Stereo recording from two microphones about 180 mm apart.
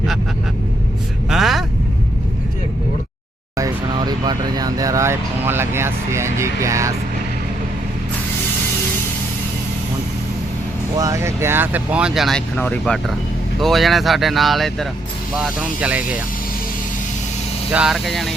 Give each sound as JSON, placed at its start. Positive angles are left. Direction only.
{"t": 1.3, "sound": "speech", "side_deg": 0}
{"t": 3.6, "sound": "speech", "side_deg": -25}
{"t": 10.9, "sound": "speech", "side_deg": -20}
{"t": 17.7, "sound": "speech", "side_deg": -5}